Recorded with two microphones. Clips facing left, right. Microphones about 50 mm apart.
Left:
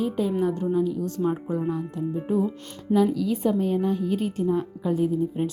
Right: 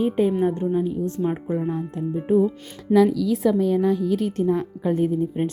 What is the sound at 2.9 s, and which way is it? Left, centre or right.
A woman's voice, right.